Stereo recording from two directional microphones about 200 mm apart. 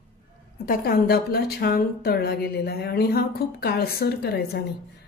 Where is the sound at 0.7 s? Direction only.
50° left (ahead or behind).